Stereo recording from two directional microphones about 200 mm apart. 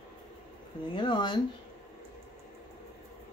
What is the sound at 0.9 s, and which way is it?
Speech, 25° left (ahead or behind).